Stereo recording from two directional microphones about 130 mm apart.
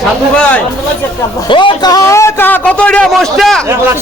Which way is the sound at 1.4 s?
40° left (ahead or behind).